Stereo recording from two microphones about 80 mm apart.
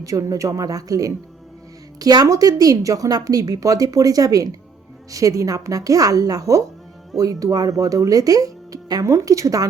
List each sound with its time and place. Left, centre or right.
0.0 s a woman's voice: right